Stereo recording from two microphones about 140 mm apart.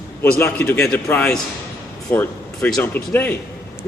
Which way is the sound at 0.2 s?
15° left (ahead or behind).